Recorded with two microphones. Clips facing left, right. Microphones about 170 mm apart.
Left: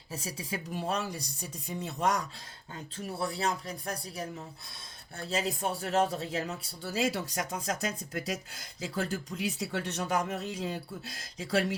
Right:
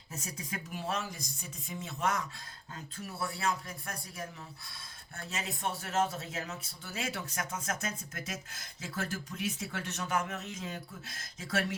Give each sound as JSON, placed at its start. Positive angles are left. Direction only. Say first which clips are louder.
{"t": 0.1, "sound": "speech", "louder": "left 4 dB", "side_deg": 30}